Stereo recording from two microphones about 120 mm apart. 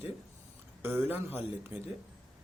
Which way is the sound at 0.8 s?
20° right (ahead or behind).